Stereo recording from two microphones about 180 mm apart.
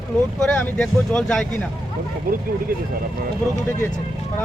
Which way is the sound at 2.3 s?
55° right (ahead or behind).